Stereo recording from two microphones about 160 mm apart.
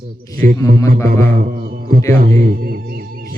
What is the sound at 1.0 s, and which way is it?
A man's voice, 65° right (ahead or behind).